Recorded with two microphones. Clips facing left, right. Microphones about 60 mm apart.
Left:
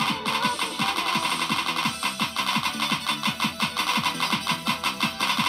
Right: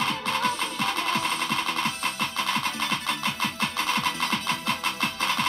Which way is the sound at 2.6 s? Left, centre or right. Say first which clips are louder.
Left 1 dB; right.